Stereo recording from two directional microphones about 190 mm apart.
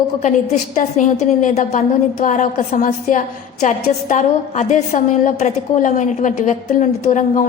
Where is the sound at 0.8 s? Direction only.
40° left (ahead or behind).